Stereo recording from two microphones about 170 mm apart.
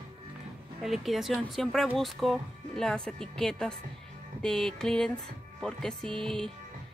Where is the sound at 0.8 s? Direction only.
Centre (ahead or behind).